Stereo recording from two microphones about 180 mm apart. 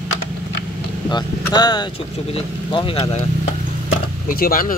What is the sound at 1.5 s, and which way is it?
Speech, 25° left (ahead or behind).